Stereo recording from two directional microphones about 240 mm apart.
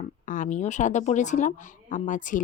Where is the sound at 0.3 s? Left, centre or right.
Left.